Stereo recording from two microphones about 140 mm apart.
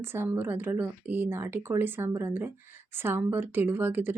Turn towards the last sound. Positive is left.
turn(degrees=-15)  # may be behind; listen again after turning